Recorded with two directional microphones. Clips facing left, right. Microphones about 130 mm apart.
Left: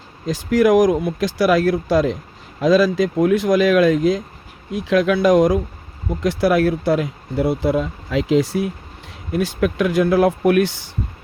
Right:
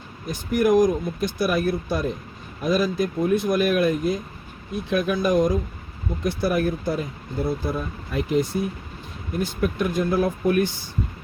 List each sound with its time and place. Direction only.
0.3 s speech: 90° left